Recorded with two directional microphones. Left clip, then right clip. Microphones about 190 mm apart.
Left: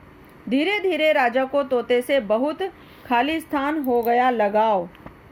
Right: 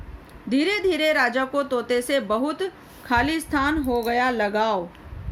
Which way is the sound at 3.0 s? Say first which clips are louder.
Left 1 dB; 35° left (ahead or behind).